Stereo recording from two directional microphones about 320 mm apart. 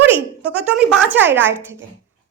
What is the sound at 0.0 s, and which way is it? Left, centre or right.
A woman's voice, centre.